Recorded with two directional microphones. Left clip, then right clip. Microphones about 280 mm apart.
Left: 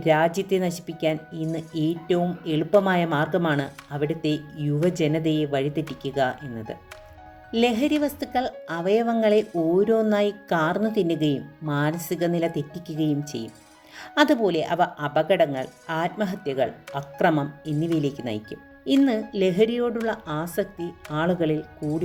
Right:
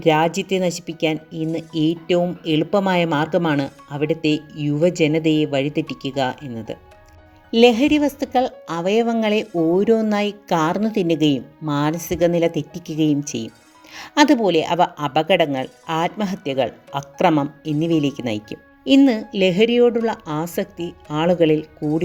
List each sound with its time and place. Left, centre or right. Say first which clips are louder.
0.0 s a woman's voice: right 3 dB; centre
7.5 s a woman's voice: right 8 dB; right